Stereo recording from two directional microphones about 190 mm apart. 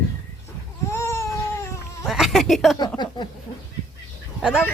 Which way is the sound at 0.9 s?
15° left (ahead or behind).